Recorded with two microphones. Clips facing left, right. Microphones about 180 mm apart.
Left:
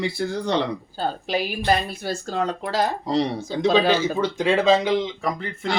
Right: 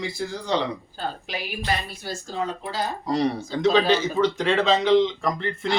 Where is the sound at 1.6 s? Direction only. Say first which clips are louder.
Left 3 dB; 65° left (ahead or behind).